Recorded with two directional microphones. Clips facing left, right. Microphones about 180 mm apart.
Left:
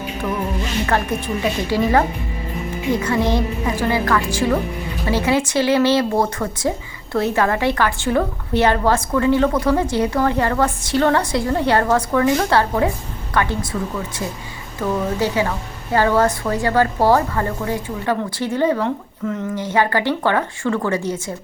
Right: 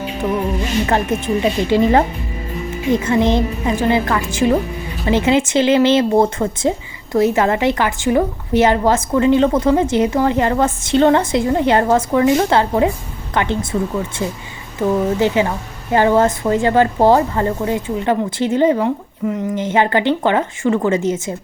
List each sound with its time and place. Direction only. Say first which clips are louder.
0.9 s speech: right 2 dB; 20° right (ahead or behind)
14.8 s speech: right 5 dB; 20° right (ahead or behind)